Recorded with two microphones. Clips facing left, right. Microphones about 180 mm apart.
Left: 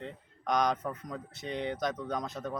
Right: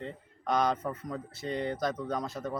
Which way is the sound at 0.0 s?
5° right (ahead or behind).